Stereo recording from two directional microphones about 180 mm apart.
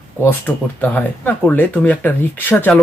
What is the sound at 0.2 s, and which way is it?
A man's voice, 10° left (ahead or behind).